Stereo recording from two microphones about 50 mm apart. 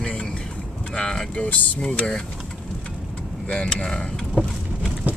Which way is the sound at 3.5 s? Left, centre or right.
Centre.